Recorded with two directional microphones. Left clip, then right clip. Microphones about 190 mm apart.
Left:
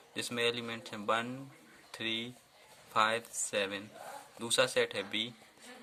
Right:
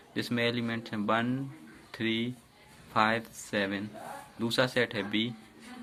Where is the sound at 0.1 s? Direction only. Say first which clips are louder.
Right 3 dB; 35° left (ahead or behind).